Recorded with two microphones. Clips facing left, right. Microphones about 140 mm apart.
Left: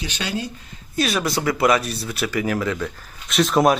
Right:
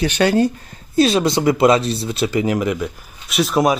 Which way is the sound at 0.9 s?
30° right (ahead or behind).